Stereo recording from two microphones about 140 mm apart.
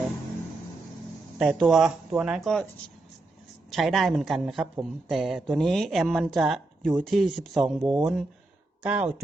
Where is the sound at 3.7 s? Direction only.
Centre (ahead or behind).